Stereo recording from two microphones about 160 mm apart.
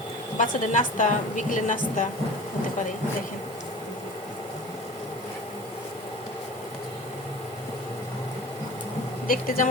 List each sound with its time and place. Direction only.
0.3 s a woman's voice: 55° left (ahead or behind)
9.2 s a woman's voice: 60° left (ahead or behind)